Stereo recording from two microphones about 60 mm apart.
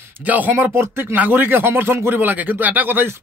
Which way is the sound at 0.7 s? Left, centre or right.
Right.